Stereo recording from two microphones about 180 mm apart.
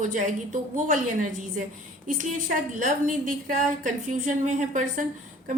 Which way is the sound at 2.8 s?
45° right (ahead or behind).